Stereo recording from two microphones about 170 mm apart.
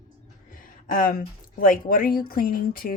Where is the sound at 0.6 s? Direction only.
55° left (ahead or behind).